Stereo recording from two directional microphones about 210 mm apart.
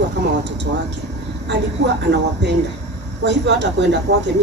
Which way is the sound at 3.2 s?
55° right (ahead or behind).